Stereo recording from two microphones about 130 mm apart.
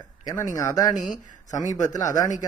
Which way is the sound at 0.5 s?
25° left (ahead or behind).